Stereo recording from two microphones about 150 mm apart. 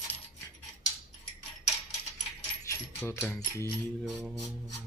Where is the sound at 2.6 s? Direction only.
15° left (ahead or behind).